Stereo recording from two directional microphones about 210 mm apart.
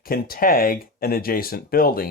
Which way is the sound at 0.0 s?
45° left (ahead or behind).